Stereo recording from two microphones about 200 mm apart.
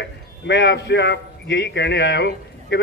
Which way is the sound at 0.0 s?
60° left (ahead or behind).